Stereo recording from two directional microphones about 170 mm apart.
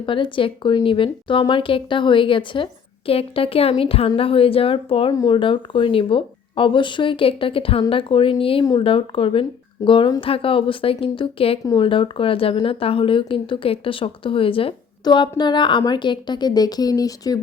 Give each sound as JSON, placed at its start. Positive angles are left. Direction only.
{"t": 0.0, "sound": "a woman's voice", "side_deg": 30}